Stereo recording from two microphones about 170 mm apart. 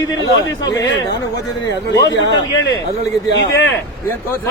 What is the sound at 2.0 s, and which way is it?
Speech, 90° left.